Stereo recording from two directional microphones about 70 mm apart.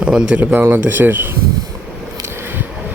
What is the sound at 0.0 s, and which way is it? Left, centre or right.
Speech, centre.